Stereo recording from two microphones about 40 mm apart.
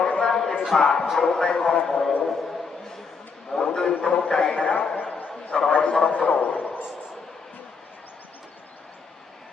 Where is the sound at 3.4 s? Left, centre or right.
Centre.